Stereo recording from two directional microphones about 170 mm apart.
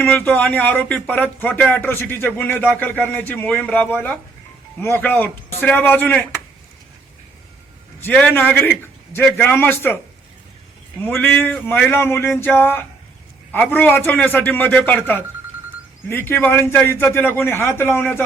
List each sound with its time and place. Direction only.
0.0 s speech: 10° left (ahead or behind)
8.0 s speech: 10° left (ahead or behind)
11.0 s speech: 10° left (ahead or behind)